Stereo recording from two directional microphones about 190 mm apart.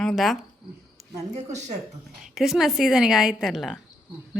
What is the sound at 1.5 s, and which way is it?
Speech, 35° right (ahead or behind).